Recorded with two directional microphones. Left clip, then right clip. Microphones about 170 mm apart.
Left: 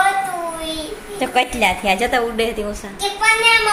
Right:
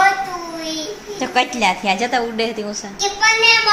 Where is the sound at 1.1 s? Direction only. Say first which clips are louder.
Left 1 dB; centre (ahead or behind).